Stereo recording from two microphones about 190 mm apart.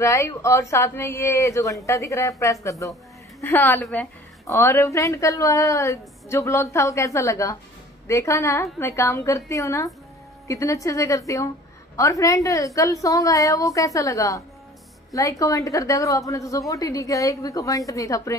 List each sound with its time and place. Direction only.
0.0 s a woman's voice: 15° left (ahead or behind)